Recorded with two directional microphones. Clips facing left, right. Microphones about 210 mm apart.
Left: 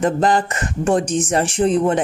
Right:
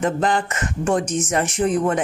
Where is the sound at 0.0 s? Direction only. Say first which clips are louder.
Left 3 dB; 35° left (ahead or behind).